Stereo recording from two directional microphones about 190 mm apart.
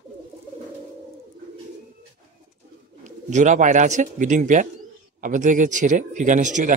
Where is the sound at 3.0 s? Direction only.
40° right (ahead or behind).